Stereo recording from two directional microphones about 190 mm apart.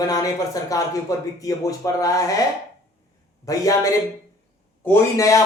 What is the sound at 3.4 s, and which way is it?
Speech, 20° left (ahead or behind).